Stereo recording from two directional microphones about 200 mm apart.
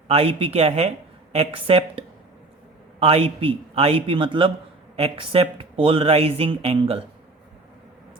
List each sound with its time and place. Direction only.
0.1 s speech: 30° right (ahead or behind)